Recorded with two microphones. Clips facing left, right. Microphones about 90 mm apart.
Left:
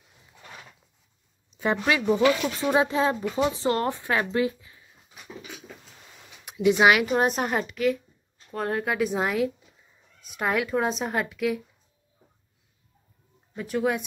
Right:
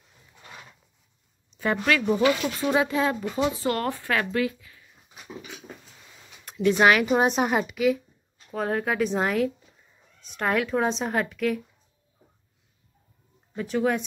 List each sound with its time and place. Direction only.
1.6 s speech: 20° left (ahead or behind)
6.4 s speech: 10° left (ahead or behind)
13.6 s speech: centre (ahead or behind)